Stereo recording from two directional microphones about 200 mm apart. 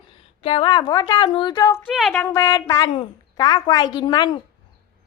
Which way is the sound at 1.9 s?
Centre (ahead or behind).